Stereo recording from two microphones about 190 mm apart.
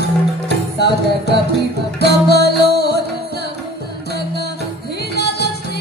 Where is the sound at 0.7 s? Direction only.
60° left (ahead or behind).